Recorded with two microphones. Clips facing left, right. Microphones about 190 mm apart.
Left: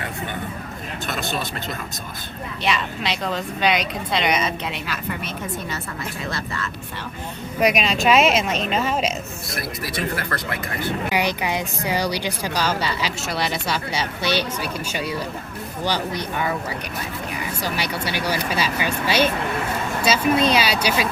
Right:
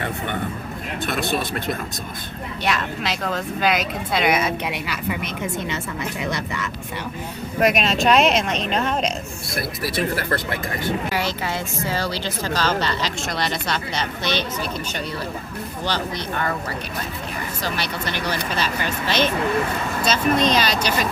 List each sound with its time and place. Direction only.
1.0 s speech: 55° right (ahead or behind)
2.6 s speech: centre (ahead or behind); by 6.6 s 15° right (ahead or behind)
7.6 s speech: centre (ahead or behind)
11.1 s a woman's voice: 15° left (ahead or behind)